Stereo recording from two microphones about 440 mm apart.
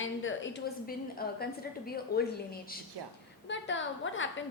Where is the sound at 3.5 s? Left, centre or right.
Left.